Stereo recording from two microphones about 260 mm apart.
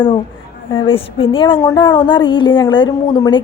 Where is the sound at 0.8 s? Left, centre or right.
Left.